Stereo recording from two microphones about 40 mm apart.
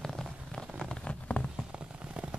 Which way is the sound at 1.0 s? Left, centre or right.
Left.